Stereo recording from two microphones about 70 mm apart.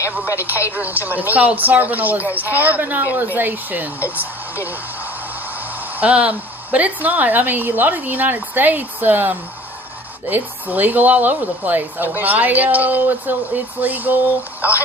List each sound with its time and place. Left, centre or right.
0.3 s speech: right